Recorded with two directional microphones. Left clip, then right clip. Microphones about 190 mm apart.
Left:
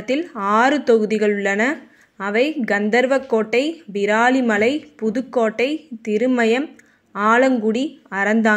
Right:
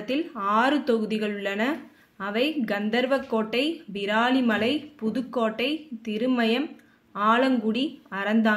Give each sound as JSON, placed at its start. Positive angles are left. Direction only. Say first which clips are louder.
{"t": 0.0, "sound": "speech", "louder": "left 6 dB", "side_deg": 40}